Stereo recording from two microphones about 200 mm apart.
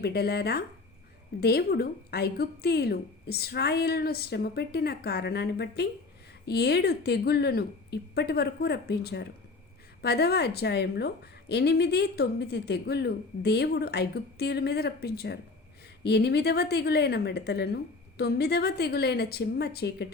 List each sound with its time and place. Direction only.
0.0 s a woman's voice: 50° left (ahead or behind)